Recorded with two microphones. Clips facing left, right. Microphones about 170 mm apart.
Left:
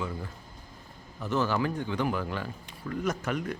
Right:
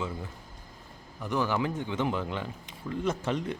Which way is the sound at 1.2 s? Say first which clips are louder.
Left 1 dB; 15° right (ahead or behind).